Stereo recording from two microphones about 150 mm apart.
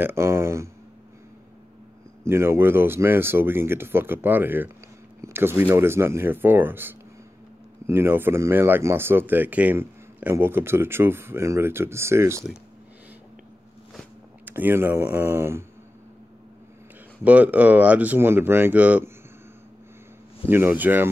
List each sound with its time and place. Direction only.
0.0 s speech: 15° right (ahead or behind)
2.2 s speech: 15° right (ahead or behind)
14.4 s speech: 15° right (ahead or behind)
17.2 s speech: 10° right (ahead or behind)
20.4 s speech: 15° right (ahead or behind)